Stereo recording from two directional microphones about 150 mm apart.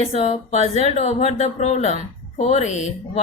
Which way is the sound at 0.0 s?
45° left (ahead or behind).